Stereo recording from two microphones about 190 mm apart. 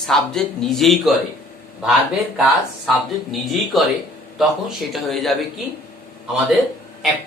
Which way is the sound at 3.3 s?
Centre (ahead or behind).